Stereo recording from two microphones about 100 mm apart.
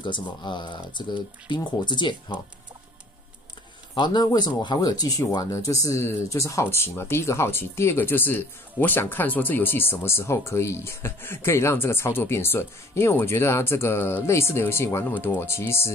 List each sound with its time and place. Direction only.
0.0 s speech: 50° left (ahead or behind)
3.9 s speech: 50° left (ahead or behind); by 15.9 s 25° left (ahead or behind)